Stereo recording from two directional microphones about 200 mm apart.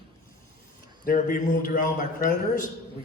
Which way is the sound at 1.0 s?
45° left (ahead or behind).